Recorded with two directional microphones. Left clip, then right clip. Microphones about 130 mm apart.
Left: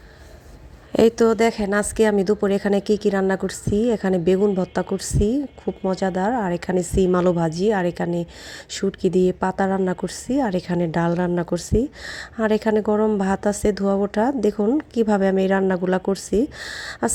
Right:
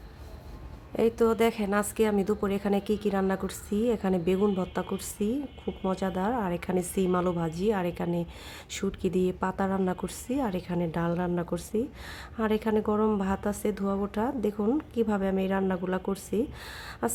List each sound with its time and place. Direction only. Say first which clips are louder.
0.9 s a woman's voice: left 8 dB; 50° left (ahead or behind)
10.7 s a woman's voice: left 8 dB; 50° left (ahead or behind)